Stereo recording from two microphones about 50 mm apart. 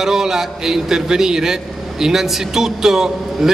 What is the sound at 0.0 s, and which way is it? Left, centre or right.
A man's voice, centre.